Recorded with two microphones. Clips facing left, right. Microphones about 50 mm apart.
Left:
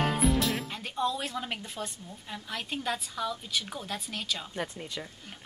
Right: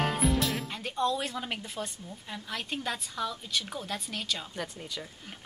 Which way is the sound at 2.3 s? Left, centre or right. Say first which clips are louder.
Even; centre.